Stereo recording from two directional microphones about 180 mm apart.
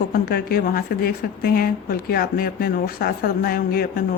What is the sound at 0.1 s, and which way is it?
Speech, 55° left (ahead or behind).